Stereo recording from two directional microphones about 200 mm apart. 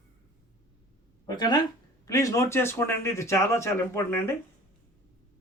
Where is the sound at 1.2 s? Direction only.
20° left (ahead or behind).